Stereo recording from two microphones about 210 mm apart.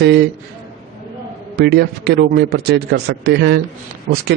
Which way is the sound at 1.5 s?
50° right (ahead or behind).